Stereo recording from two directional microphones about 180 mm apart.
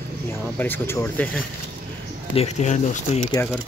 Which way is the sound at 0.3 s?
10° left (ahead or behind).